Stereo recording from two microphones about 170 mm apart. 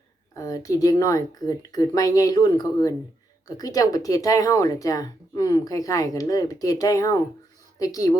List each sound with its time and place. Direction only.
0.3 s speech: 20° left (ahead or behind)